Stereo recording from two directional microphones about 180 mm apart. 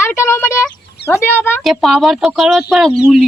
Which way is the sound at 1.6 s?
Centre (ahead or behind).